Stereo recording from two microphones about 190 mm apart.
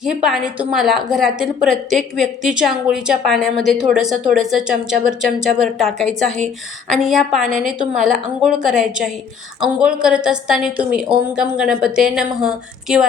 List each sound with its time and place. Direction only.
0.0 s a woman's voice: 5° right (ahead or behind)